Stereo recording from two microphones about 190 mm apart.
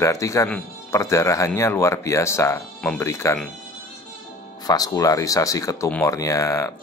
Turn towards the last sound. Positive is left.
turn(degrees=15)  # may be behind; listen again after turning